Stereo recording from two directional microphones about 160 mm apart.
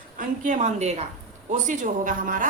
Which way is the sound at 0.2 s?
50° right (ahead or behind).